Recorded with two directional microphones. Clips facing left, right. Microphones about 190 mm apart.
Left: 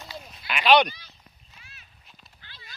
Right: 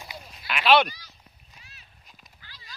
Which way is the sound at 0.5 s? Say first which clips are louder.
Left 1 dB; centre (ahead or behind).